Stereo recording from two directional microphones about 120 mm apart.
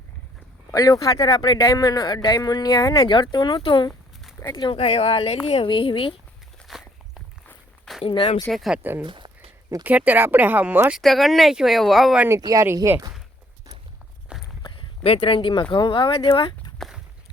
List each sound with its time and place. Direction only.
0.7 s speech: 30° left (ahead or behind); by 6.1 s 45° left (ahead or behind)
6.7 s walk: 5° right (ahead or behind)
8.0 s speech: 50° left (ahead or behind)
8.5 s speech: centre (ahead or behind)
9.0 s a sound: 40° right (ahead or behind)
9.8 s speech: 15° right (ahead or behind)
11.0 s speech: centre (ahead or behind)
12.4 s speech: 30° right (ahead or behind)
14.3 s walk: 5° right (ahead or behind)
14.6 s a sound: 45° left (ahead or behind)
15.7 s speech: 45° left (ahead or behind)
16.7 s walk: centre (ahead or behind)